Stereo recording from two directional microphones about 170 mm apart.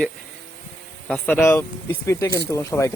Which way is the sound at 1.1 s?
10° left (ahead or behind).